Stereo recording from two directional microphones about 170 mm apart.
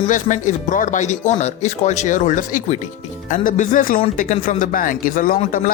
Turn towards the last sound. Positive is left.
turn(degrees=55)  # may be behind; listen again after turning